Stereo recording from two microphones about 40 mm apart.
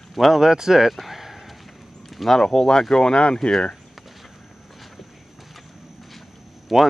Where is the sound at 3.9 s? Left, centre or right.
Centre.